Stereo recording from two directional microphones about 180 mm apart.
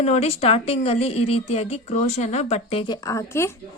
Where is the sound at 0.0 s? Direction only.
35° left (ahead or behind); by 3.5 s 15° left (ahead or behind).